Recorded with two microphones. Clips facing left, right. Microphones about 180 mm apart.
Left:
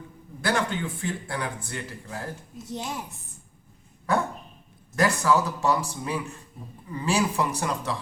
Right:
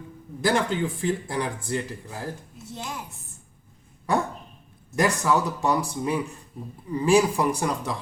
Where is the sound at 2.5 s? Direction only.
20° left (ahead or behind).